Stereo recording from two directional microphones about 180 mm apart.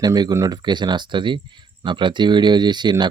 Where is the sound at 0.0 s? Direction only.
20° right (ahead or behind).